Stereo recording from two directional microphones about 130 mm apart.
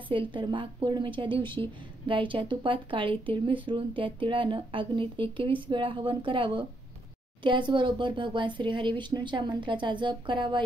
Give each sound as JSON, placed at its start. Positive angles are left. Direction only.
{"t": 0.1, "sound": "a woman's voice", "side_deg": -40}